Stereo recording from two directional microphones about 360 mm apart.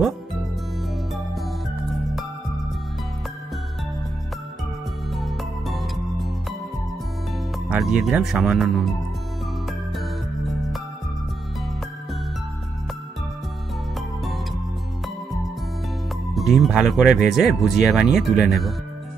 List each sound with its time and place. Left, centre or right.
5.1 s music: centre
7.7 s speech: centre
9.7 s music: centre
16.3 s speech: centre